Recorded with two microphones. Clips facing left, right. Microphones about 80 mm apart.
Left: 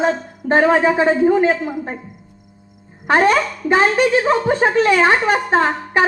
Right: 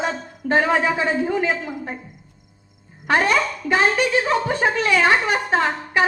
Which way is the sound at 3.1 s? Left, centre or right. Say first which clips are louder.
Left 4 dB; left.